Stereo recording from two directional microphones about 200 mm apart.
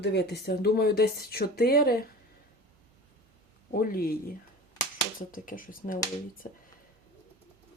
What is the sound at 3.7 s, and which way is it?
Speech, 45° left (ahead or behind).